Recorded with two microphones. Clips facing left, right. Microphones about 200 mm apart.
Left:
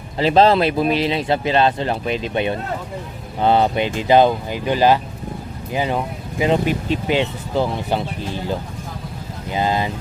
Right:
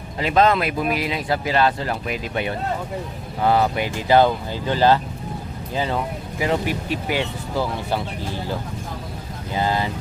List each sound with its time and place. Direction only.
0.2 s speech: 30° left (ahead or behind)
9.5 s speech: 20° left (ahead or behind)